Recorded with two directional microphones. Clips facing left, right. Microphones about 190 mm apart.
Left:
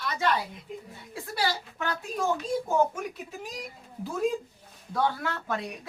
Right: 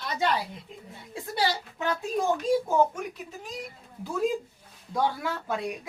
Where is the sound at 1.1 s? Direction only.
20° right (ahead or behind).